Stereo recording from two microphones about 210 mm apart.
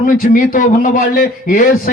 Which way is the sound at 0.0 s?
40° left (ahead or behind).